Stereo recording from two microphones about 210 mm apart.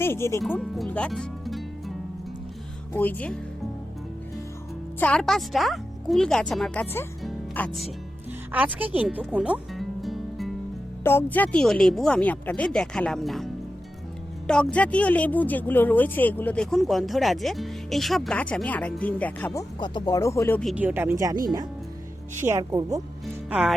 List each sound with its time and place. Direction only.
0.0 s speech: 10° left (ahead or behind)
2.9 s speech: 10° left (ahead or behind)
4.9 s speech: 5° left (ahead or behind)
8.5 s speech: 5° right (ahead or behind)
11.0 s speech: 10° left (ahead or behind)
19.8 s speech: 20° left (ahead or behind)
20.6 s speech: 5° right (ahead or behind)
22.4 s speech: 15° right (ahead or behind)
23.2 s music: centre (ahead or behind)